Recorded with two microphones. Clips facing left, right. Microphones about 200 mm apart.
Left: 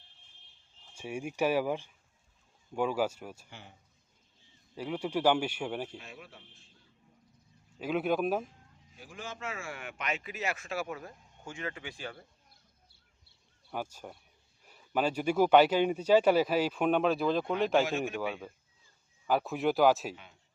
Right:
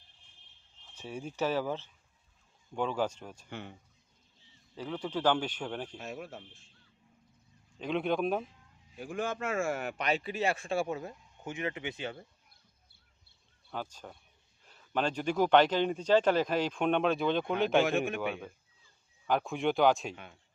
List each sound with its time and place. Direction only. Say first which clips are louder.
0.9 s speech: left 2 dB; 15° left (ahead or behind)
3.5 s a man's voice: right 9 dB; 60° right (ahead or behind)
4.7 s speech: left 2 dB; 10° left (ahead or behind)
6.0 s speech: right 8 dB; 45° right (ahead or behind)
7.8 s speech: left 1 dB; 5° left (ahead or behind)
9.0 s speech: right 8 dB; 55° right (ahead or behind); by 12.2 s 20° right (ahead or behind)
13.7 s speech: left 2 dB; 10° left (ahead or behind)
17.8 s a man's voice: right 3 dB; 55° right (ahead or behind)
18.2 s speech: even; centre (ahead or behind)